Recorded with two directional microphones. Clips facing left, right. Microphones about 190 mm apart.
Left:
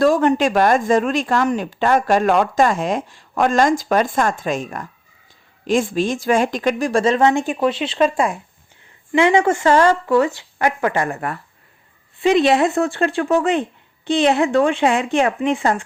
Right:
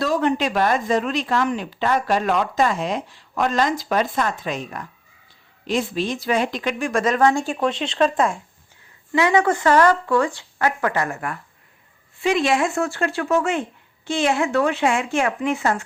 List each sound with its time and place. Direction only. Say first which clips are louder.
0.0 s a woman's voice: left 5 dB; 50° left (ahead or behind); by 8.4 s 10° left (ahead or behind)
9.1 s a woman's voice: left 3 dB; 25° left (ahead or behind)